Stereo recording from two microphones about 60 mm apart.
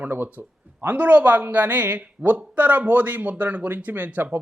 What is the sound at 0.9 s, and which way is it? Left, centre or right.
A man's voice, right.